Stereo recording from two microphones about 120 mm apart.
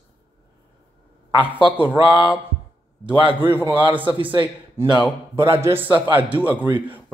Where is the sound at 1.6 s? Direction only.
15° right (ahead or behind).